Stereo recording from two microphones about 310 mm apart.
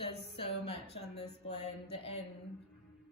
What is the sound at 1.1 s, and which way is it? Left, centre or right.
A woman's voice, left.